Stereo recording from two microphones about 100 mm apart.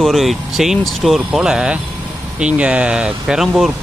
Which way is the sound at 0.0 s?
Centre (ahead or behind).